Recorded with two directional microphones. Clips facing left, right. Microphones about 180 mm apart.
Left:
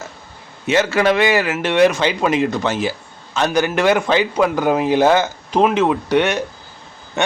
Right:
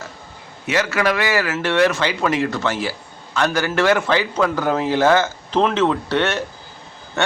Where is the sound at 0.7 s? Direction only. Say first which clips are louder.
Left 4 dB; 25° left (ahead or behind).